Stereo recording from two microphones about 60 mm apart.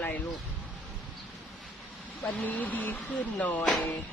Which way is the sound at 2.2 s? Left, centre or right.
Left.